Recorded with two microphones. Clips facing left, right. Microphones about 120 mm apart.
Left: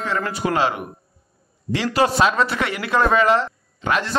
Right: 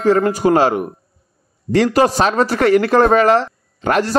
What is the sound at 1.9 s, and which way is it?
A man's voice, 40° right (ahead or behind).